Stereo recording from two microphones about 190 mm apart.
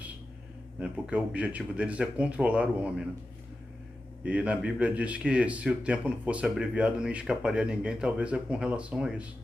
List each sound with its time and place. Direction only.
0.8 s speech: 5° right (ahead or behind)
4.2 s speech: 5° right (ahead or behind)